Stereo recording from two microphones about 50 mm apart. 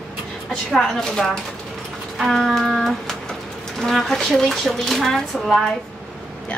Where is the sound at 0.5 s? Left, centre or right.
Centre.